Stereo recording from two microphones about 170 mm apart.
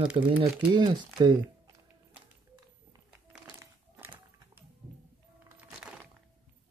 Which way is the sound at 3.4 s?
15° right (ahead or behind).